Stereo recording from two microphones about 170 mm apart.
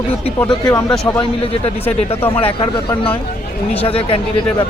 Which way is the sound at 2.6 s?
30° left (ahead or behind).